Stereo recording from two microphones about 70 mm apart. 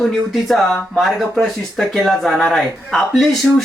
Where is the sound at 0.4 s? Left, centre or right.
Centre.